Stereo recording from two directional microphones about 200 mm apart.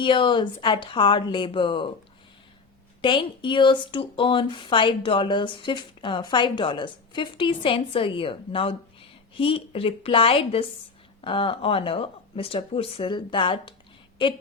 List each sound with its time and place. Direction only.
0.0 s speech: 25° left (ahead or behind)
3.0 s speech: 25° left (ahead or behind)